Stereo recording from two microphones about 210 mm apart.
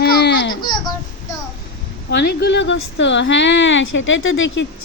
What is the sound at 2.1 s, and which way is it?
A woman's voice, 50° left (ahead or behind).